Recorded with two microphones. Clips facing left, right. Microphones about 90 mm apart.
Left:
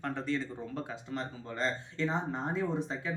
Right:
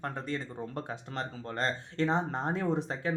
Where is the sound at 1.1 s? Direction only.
60° right (ahead or behind).